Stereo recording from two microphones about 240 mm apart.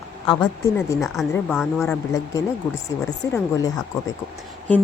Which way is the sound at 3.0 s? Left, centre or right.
Centre.